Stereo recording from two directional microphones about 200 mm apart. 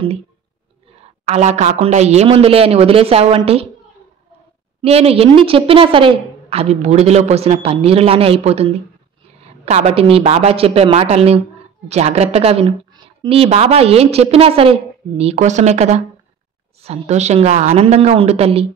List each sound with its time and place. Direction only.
1.2 s speech: 35° right (ahead or behind)
4.8 s a woman's voice: 30° right (ahead or behind)